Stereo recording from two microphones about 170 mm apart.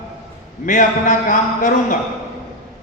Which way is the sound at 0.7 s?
50° left (ahead or behind).